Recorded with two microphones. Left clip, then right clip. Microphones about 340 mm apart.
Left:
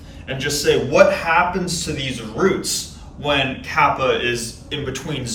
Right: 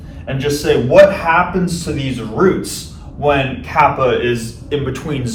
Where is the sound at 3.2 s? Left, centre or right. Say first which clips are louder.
Right 5 dB; centre.